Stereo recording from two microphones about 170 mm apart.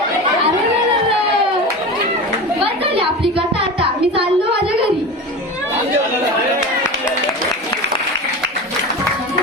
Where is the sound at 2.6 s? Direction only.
35° right (ahead or behind).